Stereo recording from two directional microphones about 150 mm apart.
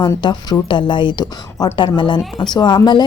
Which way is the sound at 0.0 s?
25° left (ahead or behind).